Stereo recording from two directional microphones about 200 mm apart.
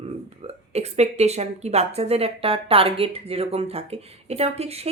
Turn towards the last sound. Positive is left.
turn(degrees=-30)  # may be behind; listen again after turning